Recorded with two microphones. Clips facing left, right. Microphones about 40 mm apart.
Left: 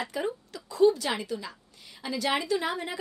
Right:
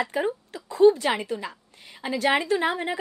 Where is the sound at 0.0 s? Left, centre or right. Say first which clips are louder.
Right 5 dB; right.